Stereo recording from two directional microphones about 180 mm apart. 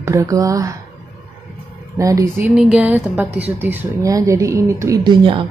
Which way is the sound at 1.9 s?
15° right (ahead or behind).